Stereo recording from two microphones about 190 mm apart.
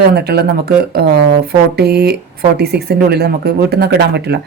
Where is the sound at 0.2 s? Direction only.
55° right (ahead or behind).